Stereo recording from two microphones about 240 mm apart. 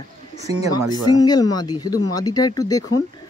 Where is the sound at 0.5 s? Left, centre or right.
Left.